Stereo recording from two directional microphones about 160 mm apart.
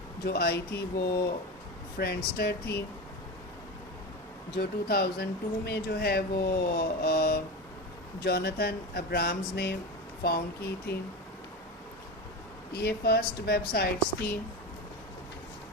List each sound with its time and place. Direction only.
0.3 s speech: 85° left
4.5 s speech: 75° left (ahead or behind)
12.7 s speech: 80° left